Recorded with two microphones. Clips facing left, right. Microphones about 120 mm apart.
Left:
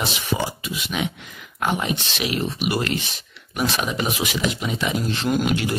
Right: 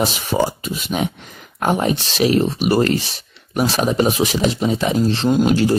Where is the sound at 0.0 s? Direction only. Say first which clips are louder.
Right 6 dB; 40° right (ahead or behind).